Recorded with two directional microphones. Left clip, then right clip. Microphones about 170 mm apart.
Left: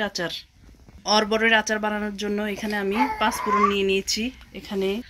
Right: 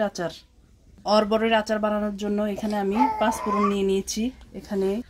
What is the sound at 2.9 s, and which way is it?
Speech, centre (ahead or behind).